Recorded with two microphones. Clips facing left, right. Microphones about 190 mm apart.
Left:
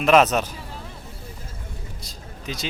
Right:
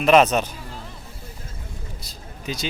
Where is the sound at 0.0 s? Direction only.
Centre (ahead or behind).